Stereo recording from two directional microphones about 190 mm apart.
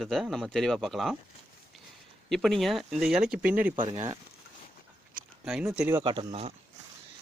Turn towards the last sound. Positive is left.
turn(degrees=-30)  # may be behind; listen again after turning